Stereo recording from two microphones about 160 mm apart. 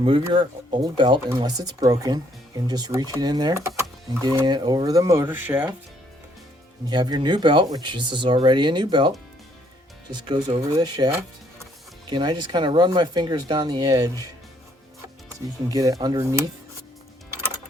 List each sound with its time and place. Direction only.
0.0 s speech: 30° right (ahead or behind); by 5.7 s 10° right (ahead or behind)
6.8 s speech: 25° right (ahead or behind)
15.7 s speech: 20° right (ahead or behind)